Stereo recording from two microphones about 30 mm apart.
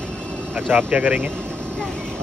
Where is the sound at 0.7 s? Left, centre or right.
Right.